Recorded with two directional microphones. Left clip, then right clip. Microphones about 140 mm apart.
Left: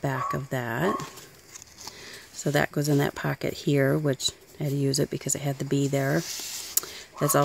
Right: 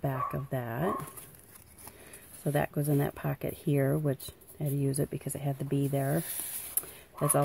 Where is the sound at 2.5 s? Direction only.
35° left (ahead or behind).